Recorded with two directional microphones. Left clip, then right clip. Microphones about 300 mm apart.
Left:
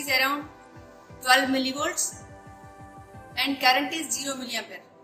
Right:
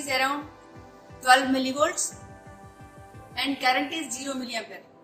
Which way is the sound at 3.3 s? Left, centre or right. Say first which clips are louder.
Left 2 dB; right.